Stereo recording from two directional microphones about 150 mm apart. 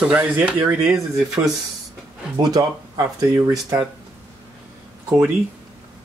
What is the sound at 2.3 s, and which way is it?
Speech, 25° right (ahead or behind).